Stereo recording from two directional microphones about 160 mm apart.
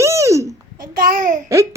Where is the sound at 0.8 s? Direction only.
60° right (ahead or behind).